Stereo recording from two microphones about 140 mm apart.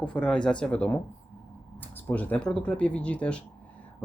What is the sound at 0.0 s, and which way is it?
Speech, 10° left (ahead or behind).